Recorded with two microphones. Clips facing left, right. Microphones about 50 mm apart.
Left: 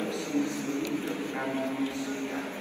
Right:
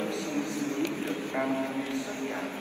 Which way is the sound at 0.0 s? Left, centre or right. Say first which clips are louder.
Left 1 dB; right.